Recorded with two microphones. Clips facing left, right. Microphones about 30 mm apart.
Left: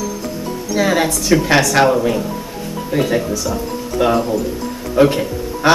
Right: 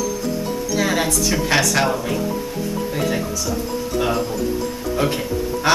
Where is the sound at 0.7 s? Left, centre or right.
Centre.